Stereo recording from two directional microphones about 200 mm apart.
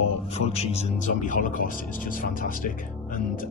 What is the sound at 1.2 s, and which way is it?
Speech, 40° left (ahead or behind).